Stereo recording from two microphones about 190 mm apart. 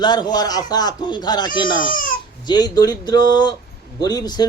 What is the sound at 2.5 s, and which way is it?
A man's voice, 20° left (ahead or behind).